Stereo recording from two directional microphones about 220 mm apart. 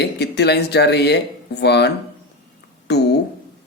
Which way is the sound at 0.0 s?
50° left (ahead or behind).